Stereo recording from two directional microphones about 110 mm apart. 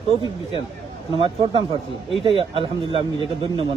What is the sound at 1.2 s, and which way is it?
Speech, 55° right (ahead or behind).